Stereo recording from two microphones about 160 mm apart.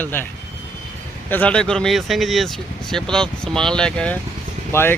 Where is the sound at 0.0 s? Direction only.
10° left (ahead or behind).